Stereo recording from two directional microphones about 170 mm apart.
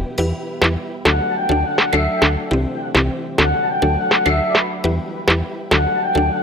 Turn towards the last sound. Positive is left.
turn(degrees=0)  # may be behind; listen again after turning